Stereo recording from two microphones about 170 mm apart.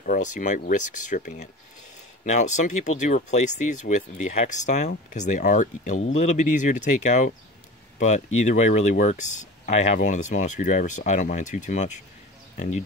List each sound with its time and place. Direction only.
0.0 s speech: 50° left (ahead or behind)